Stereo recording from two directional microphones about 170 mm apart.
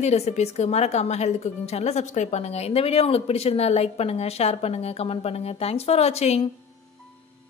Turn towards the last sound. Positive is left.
turn(degrees=40)  # may be behind; listen again after turning